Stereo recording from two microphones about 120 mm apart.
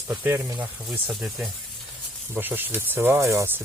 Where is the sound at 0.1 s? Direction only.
20° right (ahead or behind).